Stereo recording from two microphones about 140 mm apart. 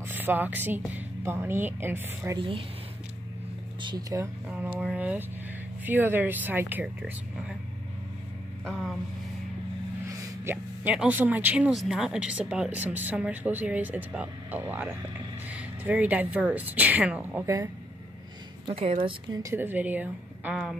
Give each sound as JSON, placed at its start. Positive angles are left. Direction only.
{"t": 0.0, "sound": "a woman's voice", "side_deg": -15}
{"t": 2.3, "sound": "speech", "side_deg": -40}
{"t": 3.8, "sound": "speech", "side_deg": -35}
{"t": 4.2, "sound": "speech", "side_deg": -10}
{"t": 8.6, "sound": "vehicle", "side_deg": 0}
{"t": 10.0, "sound": "speech", "side_deg": -15}
{"t": 18.7, "sound": "a woman's voice", "side_deg": -45}
{"t": 19.5, "sound": "speech", "side_deg": -15}